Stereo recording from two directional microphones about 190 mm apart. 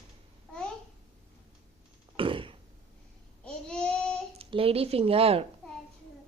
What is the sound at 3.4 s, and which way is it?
Babbling, 5° left (ahead or behind).